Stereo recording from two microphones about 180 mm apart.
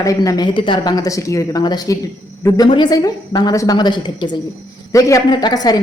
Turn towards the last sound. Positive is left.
turn(degrees=20)  # may be behind; listen again after turning